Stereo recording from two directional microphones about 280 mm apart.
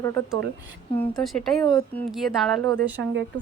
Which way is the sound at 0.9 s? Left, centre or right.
Centre.